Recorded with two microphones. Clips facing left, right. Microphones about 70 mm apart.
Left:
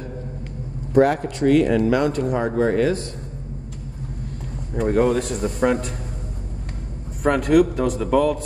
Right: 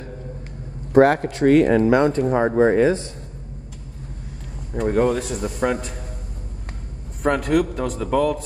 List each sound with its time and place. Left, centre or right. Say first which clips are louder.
0.9 s speech: right 2 dB; right
4.7 s a man's voice: left 1 dB; centre
7.2 s a man's voice: left 3 dB; centre